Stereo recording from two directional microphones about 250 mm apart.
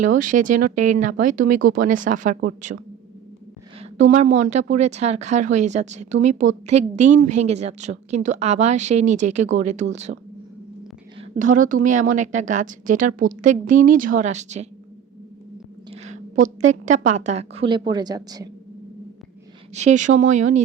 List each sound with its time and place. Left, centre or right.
0.0 s a woman's voice: right
3.8 s a woman's voice: right
11.2 s a woman's voice: right
15.9 s a sound: right
16.6 s a woman's voice: right
19.7 s a woman's voice: right